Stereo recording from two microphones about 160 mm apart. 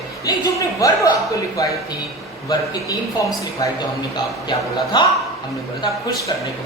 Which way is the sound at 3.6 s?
25° left (ahead or behind).